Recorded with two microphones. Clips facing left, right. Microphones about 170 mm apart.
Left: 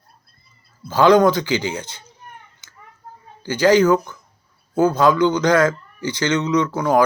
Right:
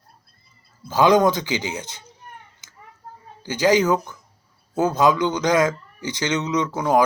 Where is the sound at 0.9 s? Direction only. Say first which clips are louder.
Left 3 dB; 15° right (ahead or behind).